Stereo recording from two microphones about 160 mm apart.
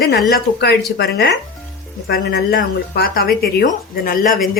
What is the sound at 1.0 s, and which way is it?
Speech, 90° left.